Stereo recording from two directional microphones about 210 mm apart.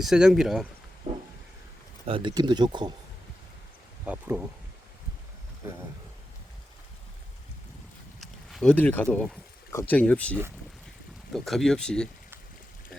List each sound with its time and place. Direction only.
0.0 s speech: centre (ahead or behind)
2.0 s speech: 25° right (ahead or behind)
4.0 s speech: 5° right (ahead or behind)
5.6 s speech: 10° right (ahead or behind)
8.2 s speech: centre (ahead or behind)
11.3 s speech: centre (ahead or behind)